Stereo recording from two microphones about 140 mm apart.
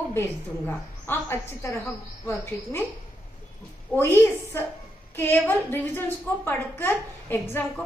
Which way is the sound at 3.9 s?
20° left (ahead or behind).